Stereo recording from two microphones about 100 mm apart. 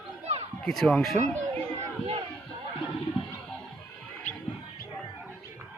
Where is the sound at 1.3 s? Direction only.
20° left (ahead or behind).